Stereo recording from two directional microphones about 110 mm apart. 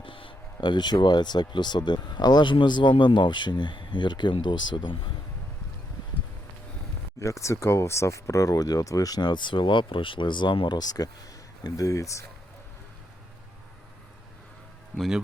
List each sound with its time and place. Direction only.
0.0 s speech: 50° left (ahead or behind)
7.2 s speech: 25° left (ahead or behind)
14.9 s speech: centre (ahead or behind)